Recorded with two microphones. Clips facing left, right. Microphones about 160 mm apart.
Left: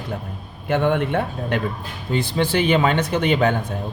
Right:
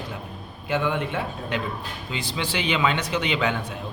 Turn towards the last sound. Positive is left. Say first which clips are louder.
# left 6 dB
turn(degrees=45)  # may be behind; listen again after turning